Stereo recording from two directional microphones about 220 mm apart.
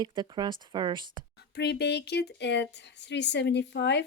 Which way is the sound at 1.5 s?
50° left (ahead or behind).